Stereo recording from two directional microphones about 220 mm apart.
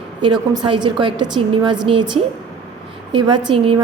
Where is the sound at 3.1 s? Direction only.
20° right (ahead or behind).